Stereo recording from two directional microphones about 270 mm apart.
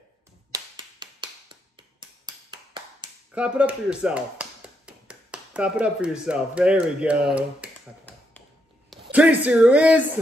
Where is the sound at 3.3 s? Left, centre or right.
Centre.